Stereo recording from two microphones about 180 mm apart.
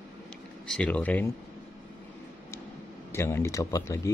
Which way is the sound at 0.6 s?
5° left (ahead or behind).